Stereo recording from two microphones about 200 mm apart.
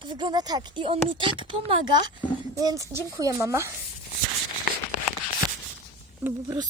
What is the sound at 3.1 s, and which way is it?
Speech, 15° right (ahead or behind).